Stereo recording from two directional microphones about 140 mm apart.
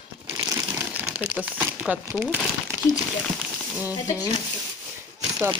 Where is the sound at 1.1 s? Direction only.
10° right (ahead or behind).